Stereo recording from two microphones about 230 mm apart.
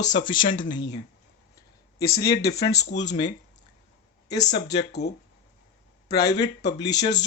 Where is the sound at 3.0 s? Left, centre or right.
Left.